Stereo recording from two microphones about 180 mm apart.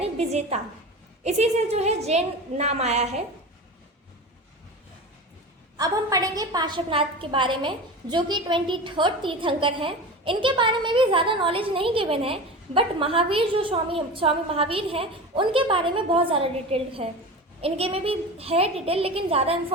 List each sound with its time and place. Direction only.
0.0 s a woman's voice: 35° right (ahead or behind)
5.7 s a woman's voice: 20° right (ahead or behind)